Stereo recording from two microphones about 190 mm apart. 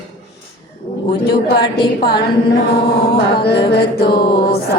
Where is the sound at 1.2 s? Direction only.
60° left (ahead or behind).